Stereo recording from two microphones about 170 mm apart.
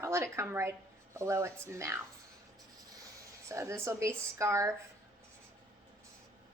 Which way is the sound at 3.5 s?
15° right (ahead or behind).